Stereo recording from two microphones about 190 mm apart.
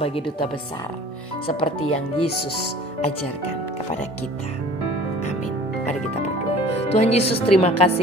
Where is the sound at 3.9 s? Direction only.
35° left (ahead or behind).